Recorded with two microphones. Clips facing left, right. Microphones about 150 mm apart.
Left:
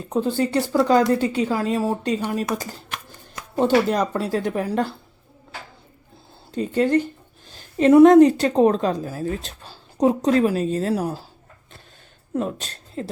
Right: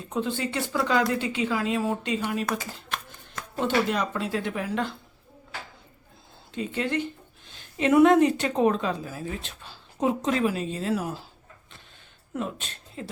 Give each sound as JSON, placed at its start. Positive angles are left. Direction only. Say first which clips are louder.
{"t": 0.1, "sound": "speech", "louder": "left 7 dB", "side_deg": 40}
{"t": 3.6, "sound": "speech", "louder": "left 7 dB", "side_deg": 40}
{"t": 6.5, "sound": "a woman's voice", "louder": "left 9 dB", "side_deg": 40}
{"t": 12.3, "sound": "speech", "louder": "left 6 dB", "side_deg": 40}